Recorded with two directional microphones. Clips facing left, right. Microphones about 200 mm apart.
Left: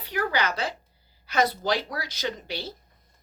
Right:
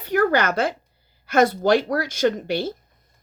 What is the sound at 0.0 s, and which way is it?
Speech, 50° right (ahead or behind).